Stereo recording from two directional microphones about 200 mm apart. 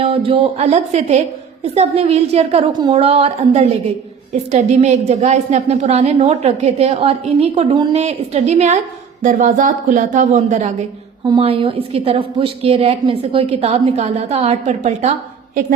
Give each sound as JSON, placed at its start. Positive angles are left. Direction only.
{"t": 0.0, "sound": "a woman's voice", "side_deg": -25}
{"t": 11.3, "sound": "a woman's voice", "side_deg": -25}